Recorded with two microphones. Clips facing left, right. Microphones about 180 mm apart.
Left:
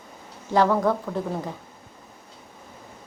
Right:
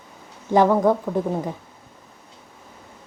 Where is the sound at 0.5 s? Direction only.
15° right (ahead or behind).